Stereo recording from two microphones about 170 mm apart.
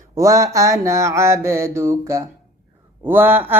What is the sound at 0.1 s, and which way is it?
Speech, 20° right (ahead or behind).